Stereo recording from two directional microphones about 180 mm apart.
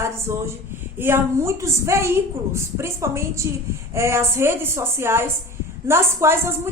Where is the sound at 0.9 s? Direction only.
15° right (ahead or behind).